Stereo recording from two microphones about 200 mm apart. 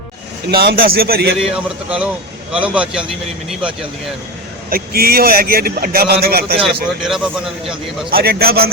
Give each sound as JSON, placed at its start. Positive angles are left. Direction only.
{"t": 0.5, "sound": "a man's voice", "side_deg": -50}
{"t": 1.4, "sound": "a man's voice", "side_deg": -5}
{"t": 4.7, "sound": "a man's voice", "side_deg": -50}
{"t": 7.0, "sound": "a man's voice", "side_deg": 0}
{"t": 8.1, "sound": "a man's voice", "side_deg": -50}